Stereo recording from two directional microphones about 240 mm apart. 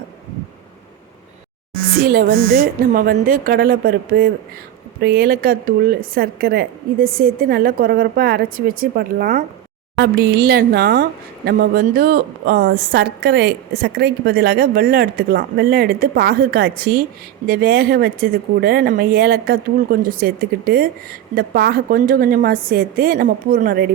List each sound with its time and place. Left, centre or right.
1.7 s a woman's voice: right